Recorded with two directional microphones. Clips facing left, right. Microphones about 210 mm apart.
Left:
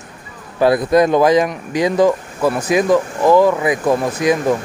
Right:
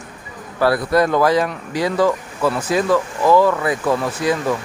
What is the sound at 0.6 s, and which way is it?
Speech, 20° left (ahead or behind).